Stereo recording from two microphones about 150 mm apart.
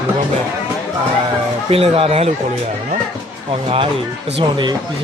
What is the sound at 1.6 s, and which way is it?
Speech, 40° right (ahead or behind).